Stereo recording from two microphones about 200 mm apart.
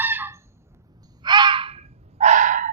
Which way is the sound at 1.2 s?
20° right (ahead or behind).